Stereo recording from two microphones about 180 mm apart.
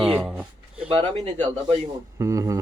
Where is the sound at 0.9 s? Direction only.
30° right (ahead or behind).